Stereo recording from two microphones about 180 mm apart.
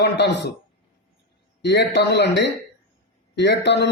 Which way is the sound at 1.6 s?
70° left (ahead or behind).